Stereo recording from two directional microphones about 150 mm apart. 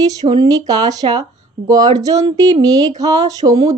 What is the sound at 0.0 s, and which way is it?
Speech, 25° right (ahead or behind).